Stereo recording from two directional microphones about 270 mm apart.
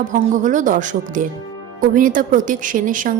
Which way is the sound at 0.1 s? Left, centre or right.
Right.